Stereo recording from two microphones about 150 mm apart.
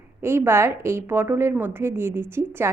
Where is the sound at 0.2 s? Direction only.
15° right (ahead or behind).